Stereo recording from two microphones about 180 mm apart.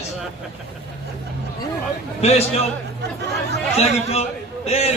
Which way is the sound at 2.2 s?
35° left (ahead or behind).